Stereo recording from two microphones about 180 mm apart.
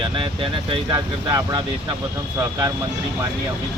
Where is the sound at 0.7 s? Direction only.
25° right (ahead or behind).